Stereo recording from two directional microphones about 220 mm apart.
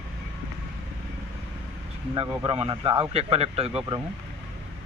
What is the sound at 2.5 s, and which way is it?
A man's voice, 25° right (ahead or behind).